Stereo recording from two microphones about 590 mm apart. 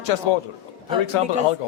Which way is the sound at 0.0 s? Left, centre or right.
Left.